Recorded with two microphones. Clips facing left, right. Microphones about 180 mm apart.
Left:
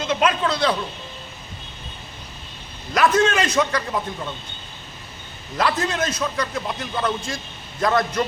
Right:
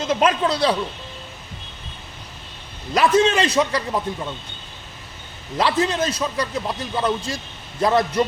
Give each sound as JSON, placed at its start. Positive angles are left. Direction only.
{"t": 0.1, "sound": "a man's voice", "side_deg": -40}
{"t": 2.9, "sound": "a man's voice", "side_deg": -30}
{"t": 5.5, "sound": "a man's voice", "side_deg": -30}
{"t": 6.5, "sound": "speech", "side_deg": -10}
{"t": 7.2, "sound": "a man's voice", "side_deg": -35}